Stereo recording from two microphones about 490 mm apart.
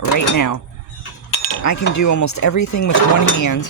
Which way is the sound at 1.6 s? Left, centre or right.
Left.